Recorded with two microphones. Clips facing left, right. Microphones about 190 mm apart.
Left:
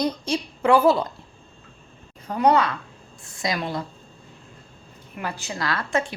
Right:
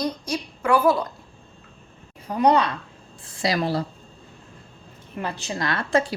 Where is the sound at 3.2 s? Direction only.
30° right (ahead or behind).